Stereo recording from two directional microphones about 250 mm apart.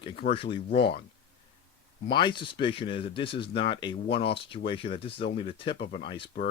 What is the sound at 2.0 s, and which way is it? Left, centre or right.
Speech, centre.